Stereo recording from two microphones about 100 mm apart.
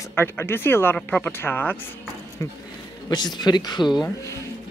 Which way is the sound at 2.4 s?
30° left (ahead or behind).